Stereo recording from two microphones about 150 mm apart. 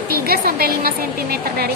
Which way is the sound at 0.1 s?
90° right.